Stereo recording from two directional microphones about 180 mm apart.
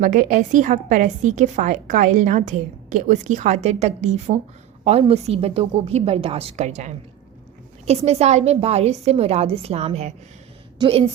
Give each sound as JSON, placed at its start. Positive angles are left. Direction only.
{"t": 0.0, "sound": "a woman's voice", "side_deg": -45}